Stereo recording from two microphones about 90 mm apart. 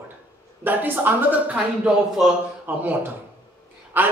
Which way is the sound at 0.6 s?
20° right (ahead or behind).